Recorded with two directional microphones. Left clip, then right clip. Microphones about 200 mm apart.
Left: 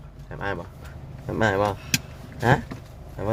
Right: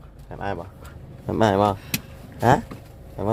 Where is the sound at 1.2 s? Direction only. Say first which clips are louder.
Right 3 dB; 20° right (ahead or behind).